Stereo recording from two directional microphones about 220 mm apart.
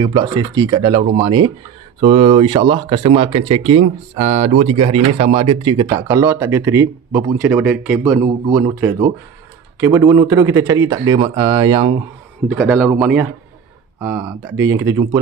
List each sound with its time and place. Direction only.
0.0 s a man's voice: 20° right (ahead or behind); by 8.0 s 5° right (ahead or behind)
8.0 s speech: 15° right (ahead or behind)
12.5 s a man's voice: 5° right (ahead or behind)